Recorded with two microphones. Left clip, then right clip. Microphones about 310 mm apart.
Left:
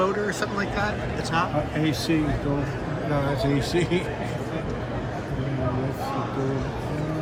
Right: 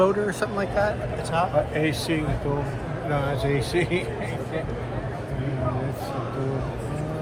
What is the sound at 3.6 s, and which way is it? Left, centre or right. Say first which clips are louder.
Speech: even; right.